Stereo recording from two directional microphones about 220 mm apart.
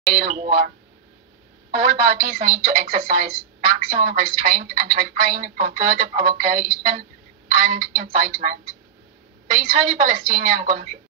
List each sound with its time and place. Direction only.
0.1 s a woman's voice: 40° right (ahead or behind)
1.7 s a woman's voice: 40° right (ahead or behind)